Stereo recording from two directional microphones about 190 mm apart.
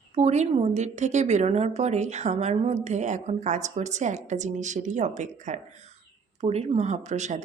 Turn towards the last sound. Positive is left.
turn(degrees=-35)  # may be behind; listen again after turning